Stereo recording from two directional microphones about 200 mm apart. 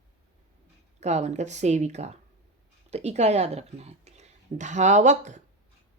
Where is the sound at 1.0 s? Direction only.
35° right (ahead or behind).